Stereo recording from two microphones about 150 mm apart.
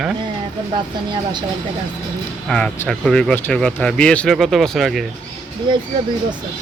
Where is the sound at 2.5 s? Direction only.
5° left (ahead or behind).